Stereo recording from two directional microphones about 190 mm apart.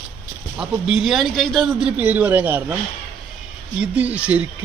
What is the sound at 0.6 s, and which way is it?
A man's voice, 5° right (ahead or behind).